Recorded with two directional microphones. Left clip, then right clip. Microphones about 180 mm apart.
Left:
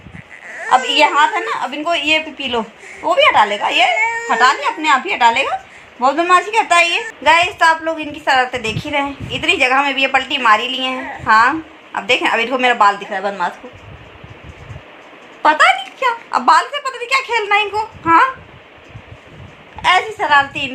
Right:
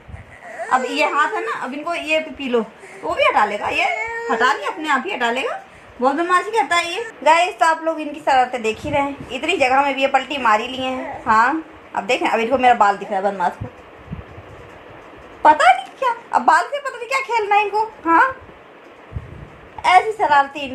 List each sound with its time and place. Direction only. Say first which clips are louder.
0.7 s a woman's voice: left 6 dB; 45° left (ahead or behind)
3.9 s speech: left 7 dB; 20° right (ahead or behind)
4.3 s a woman's voice: left 3 dB; 45° left (ahead or behind)
6.0 s a woman's voice: left 4 dB; 55° left (ahead or behind)
7.3 s a woman's voice: left 3 dB; centre (ahead or behind)
15.4 s speech: left 1 dB; 5° right (ahead or behind)
19.8 s a woman's voice: even; 5° right (ahead or behind)